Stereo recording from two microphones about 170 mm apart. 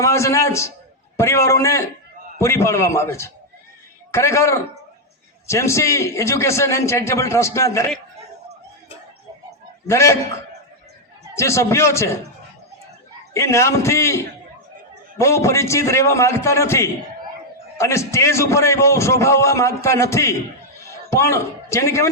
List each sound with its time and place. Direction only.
0.0 s a man's voice: 15° left (ahead or behind)
9.8 s a man's voice: 15° left (ahead or behind)
11.3 s a man's voice: 15° left (ahead or behind)
13.3 s a man's voice: 15° left (ahead or behind)
15.2 s a man's voice: 15° left (ahead or behind)